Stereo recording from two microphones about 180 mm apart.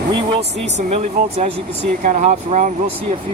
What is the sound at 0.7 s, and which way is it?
Speech, 40° right (ahead or behind).